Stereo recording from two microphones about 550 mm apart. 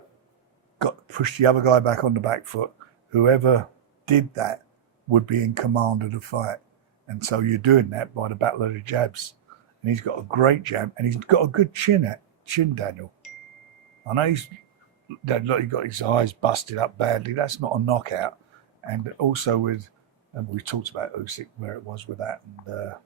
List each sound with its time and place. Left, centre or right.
0.8 s speech: right
14.1 s speech: right
19.3 s speech: right
21.0 s speech: right